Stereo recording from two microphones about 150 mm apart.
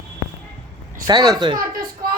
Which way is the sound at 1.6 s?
75° right (ahead or behind).